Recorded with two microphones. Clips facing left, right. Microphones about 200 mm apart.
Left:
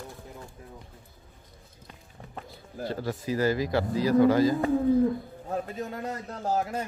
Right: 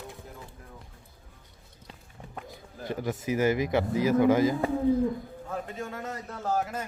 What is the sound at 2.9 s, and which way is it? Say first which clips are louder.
Speech: right 1 dB; 20° right (ahead or behind).